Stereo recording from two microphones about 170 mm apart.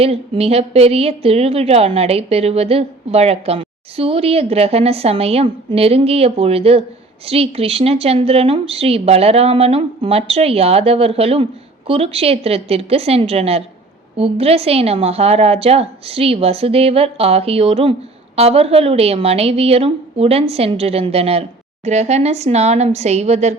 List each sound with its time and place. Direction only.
0.0 s a woman's voice: 35° right (ahead or behind)